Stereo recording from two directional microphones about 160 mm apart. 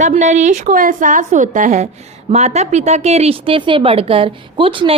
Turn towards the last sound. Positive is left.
turn(degrees=-35)  # may be behind; listen again after turning